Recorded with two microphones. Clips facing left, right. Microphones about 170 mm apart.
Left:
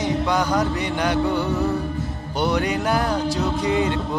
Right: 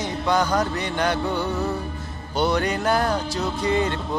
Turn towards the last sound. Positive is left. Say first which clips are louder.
# left 2 dB
turn(degrees=10)  # may be behind; listen again after turning